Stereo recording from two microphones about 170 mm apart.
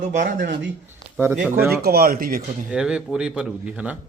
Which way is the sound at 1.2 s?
10° right (ahead or behind).